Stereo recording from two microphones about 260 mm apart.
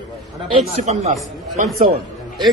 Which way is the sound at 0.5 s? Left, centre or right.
Right.